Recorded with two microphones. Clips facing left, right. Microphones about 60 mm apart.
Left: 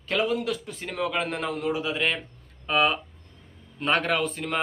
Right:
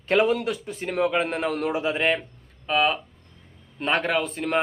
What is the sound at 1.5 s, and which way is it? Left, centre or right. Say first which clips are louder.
Speech: right 3 dB; right.